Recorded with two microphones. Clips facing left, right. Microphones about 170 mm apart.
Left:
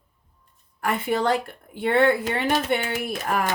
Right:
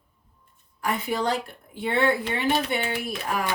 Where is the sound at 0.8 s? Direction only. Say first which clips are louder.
Left 3 dB; 55° left (ahead or behind).